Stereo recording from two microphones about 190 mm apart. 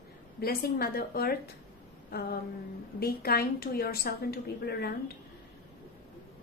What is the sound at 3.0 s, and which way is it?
A woman's voice, 55° left (ahead or behind).